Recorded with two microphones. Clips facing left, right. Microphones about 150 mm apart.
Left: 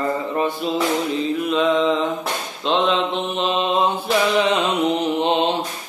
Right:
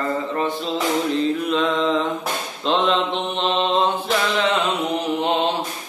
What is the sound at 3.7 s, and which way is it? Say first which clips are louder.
Mantra: left 1 dB; 10° left (ahead or behind).